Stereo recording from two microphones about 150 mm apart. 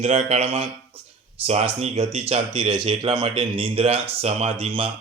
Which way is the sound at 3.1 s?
35° right (ahead or behind).